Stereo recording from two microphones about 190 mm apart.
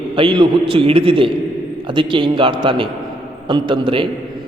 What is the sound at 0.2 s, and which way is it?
A man's voice, 25° right (ahead or behind).